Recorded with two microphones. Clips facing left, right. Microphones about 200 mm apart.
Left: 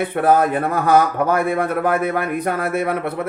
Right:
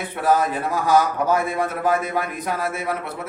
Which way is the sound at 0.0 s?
55° left (ahead or behind).